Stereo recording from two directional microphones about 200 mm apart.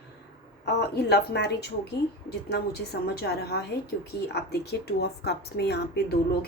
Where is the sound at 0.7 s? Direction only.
55° left (ahead or behind).